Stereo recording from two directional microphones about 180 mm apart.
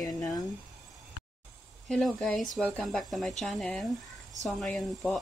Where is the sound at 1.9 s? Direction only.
Centre (ahead or behind).